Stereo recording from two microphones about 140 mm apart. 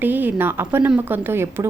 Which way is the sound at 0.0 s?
15° right (ahead or behind).